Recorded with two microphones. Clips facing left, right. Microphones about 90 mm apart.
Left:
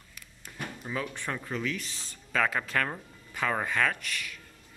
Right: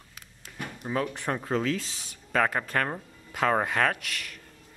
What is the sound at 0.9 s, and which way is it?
Speech, 50° right (ahead or behind).